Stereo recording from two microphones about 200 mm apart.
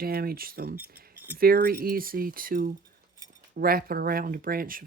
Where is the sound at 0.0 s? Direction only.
50° right (ahead or behind).